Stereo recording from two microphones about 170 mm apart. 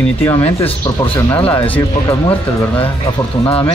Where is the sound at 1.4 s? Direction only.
10° left (ahead or behind).